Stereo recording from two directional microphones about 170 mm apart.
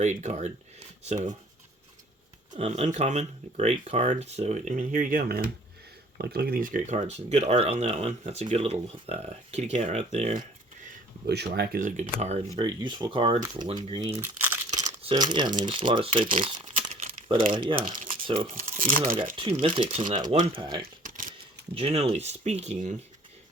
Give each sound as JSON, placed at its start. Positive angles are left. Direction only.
{"t": 0.0, "sound": "speech", "side_deg": -45}
{"t": 2.5, "sound": "speech", "side_deg": -40}
{"t": 6.1, "sound": "speech", "side_deg": -65}
{"t": 11.3, "sound": "speech", "side_deg": -70}
{"t": 12.5, "sound": "speech", "side_deg": -25}
{"t": 14.2, "sound": "crumpling", "side_deg": -15}
{"t": 14.8, "sound": "crumpling", "side_deg": -45}
{"t": 15.1, "sound": "speech", "side_deg": -25}
{"t": 17.7, "sound": "speech", "side_deg": -55}
{"t": 18.2, "sound": "speech", "side_deg": -30}
{"t": 18.6, "sound": "speech", "side_deg": -55}
{"t": 19.4, "sound": "speech", "side_deg": -30}
{"t": 20.8, "sound": "a sound", "side_deg": -55}
{"t": 21.8, "sound": "speech", "side_deg": -35}